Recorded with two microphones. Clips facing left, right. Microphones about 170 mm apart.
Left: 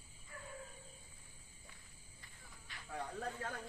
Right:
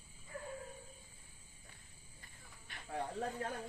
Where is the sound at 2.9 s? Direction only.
30° right (ahead or behind).